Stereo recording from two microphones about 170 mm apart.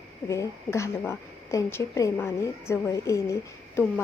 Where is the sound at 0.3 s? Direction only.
15° left (ahead or behind).